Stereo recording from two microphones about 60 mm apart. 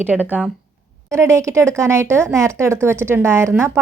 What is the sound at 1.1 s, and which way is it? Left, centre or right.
A woman's voice, right.